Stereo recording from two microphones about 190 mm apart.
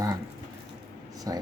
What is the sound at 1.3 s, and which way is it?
Speech, 20° right (ahead or behind).